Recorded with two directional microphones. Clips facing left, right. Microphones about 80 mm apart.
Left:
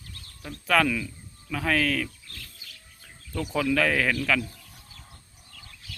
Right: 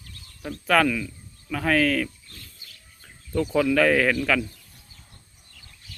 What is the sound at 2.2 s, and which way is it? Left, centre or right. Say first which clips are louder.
Bird: left 2 dB; left.